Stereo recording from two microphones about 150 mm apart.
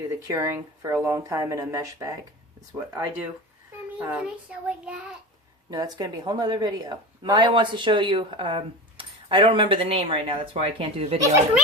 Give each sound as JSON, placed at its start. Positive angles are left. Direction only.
{"t": 0.3, "sound": "a child's voice", "side_deg": -20}
{"t": 5.7, "sound": "a woman's voice", "side_deg": -25}